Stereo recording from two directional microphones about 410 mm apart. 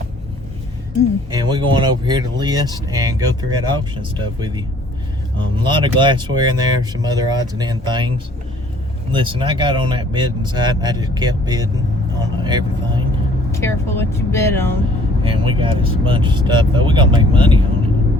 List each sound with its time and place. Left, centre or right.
1.3 s speech: centre
9.1 s speech: centre
13.5 s speech: centre
15.2 s speech: centre